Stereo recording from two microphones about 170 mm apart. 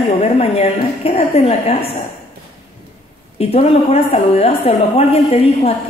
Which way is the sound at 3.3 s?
35° left (ahead or behind).